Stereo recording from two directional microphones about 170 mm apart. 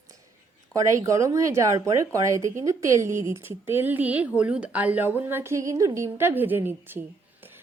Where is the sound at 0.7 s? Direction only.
20° right (ahead or behind).